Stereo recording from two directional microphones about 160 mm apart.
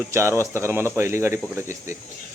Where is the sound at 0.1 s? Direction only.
15° right (ahead or behind).